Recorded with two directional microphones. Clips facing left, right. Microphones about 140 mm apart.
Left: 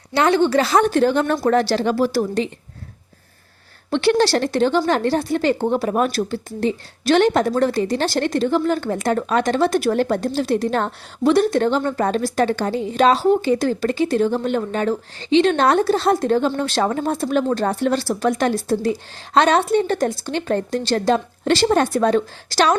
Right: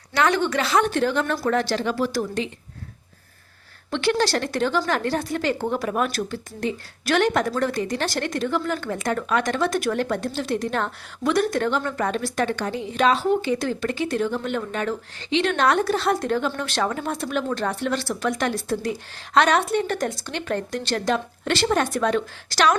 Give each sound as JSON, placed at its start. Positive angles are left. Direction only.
{"t": 0.1, "sound": "a woman's voice", "side_deg": 30}
{"t": 3.8, "sound": "a woman's voice", "side_deg": 35}